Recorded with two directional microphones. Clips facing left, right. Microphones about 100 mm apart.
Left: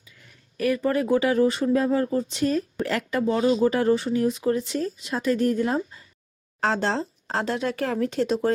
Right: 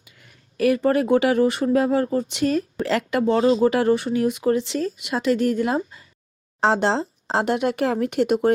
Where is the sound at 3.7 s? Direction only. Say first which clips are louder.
Right 2 dB; 65° right (ahead or behind).